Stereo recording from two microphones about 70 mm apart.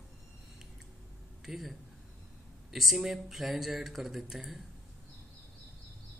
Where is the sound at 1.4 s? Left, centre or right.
Centre.